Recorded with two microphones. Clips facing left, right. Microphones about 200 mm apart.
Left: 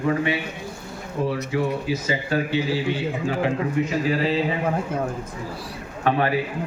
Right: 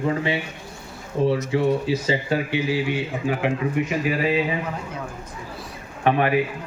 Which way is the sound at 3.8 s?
15° right (ahead or behind).